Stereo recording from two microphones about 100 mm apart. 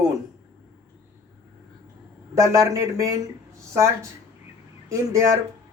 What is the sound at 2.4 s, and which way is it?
Speech, 30° right (ahead or behind).